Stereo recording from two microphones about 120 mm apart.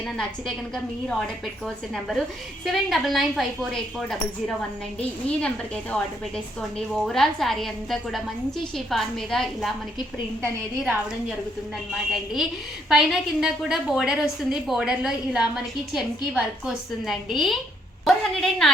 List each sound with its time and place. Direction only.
1.6 s a woman's voice: centre (ahead or behind)
11.9 s a woman's voice: centre (ahead or behind)